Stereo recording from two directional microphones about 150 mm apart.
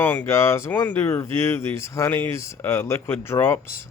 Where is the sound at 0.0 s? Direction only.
15° left (ahead or behind).